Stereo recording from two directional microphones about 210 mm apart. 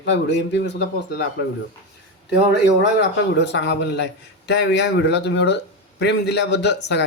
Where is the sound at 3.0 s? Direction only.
55° left (ahead or behind).